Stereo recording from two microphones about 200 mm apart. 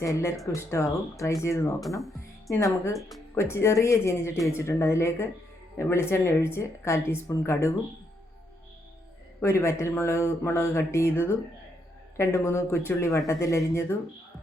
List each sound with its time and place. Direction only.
0.0 s speech: 15° left (ahead or behind)
2.9 s speech: centre (ahead or behind)
3.3 s speech: 15° left (ahead or behind)
9.4 s speech: 15° left (ahead or behind)